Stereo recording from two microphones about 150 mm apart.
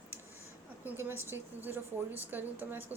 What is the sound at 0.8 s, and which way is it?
A woman's voice, 15° right (ahead or behind).